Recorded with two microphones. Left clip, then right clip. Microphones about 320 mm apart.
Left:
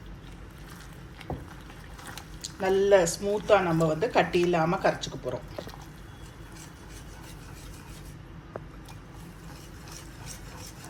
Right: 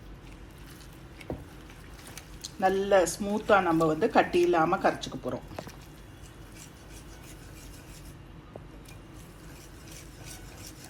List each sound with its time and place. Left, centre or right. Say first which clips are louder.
1.3 s vehicle: left 1 dB; centre
2.4 s speech: left 2 dB; centre